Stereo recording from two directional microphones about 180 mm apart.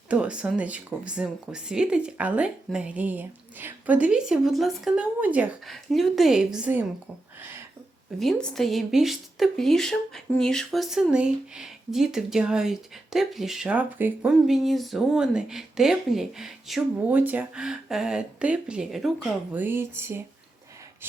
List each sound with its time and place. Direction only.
0.1 s speech: 5° right (ahead or behind)
7.3 s a sound: 10° right (ahead or behind)
8.2 s speech: 5° left (ahead or behind); by 20.2 s 15° right (ahead or behind)